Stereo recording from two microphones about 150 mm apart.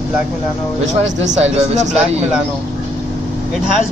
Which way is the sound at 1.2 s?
50° right (ahead or behind).